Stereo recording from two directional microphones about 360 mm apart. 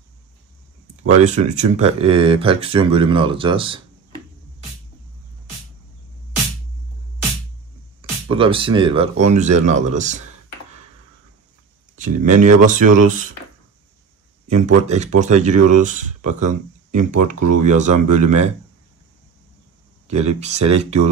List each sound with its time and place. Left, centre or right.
1.1 s speech: centre
8.3 s speech: centre
12.0 s speech: right
14.5 s speech: centre
17.4 s speech: right
17.6 s speech: centre
20.1 s speech: centre